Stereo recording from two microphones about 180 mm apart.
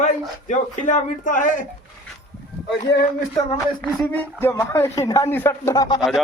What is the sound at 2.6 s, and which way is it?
Speech, 65° left (ahead or behind).